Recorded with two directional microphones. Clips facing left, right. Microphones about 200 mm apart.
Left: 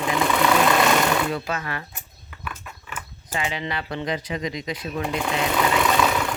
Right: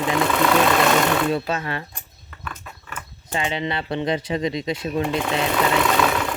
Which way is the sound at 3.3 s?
25° right (ahead or behind).